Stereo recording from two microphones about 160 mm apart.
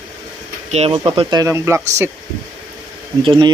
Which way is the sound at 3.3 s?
30° right (ahead or behind).